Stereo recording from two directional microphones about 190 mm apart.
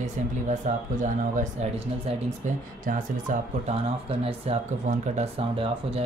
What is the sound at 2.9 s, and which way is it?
Speech, 45° right (ahead or behind).